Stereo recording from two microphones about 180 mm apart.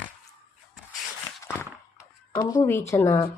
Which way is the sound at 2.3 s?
20° left (ahead or behind).